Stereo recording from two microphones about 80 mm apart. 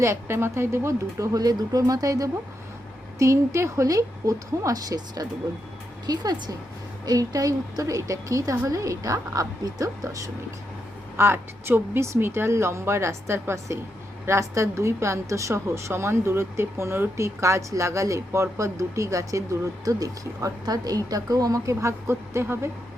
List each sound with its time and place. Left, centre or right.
0.0 s a woman's voice: right
11.2 s a woman's voice: right